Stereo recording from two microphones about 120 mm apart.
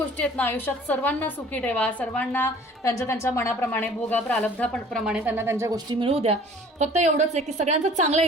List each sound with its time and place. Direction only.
0.2 s a woman's voice: 15° left (ahead or behind); by 5.3 s 5° right (ahead or behind)
5.4 s a woman's voice: 20° right (ahead or behind)
6.1 s speech: 55° right (ahead or behind)